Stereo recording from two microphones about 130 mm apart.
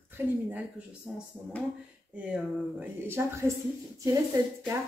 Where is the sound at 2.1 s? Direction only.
15° right (ahead or behind).